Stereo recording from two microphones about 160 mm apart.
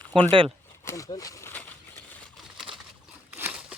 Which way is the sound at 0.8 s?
20° left (ahead or behind).